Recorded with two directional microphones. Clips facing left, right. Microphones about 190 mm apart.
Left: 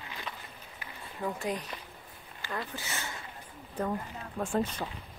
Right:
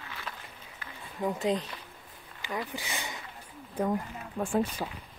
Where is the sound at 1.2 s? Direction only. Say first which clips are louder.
Right 5 dB; 20° right (ahead or behind).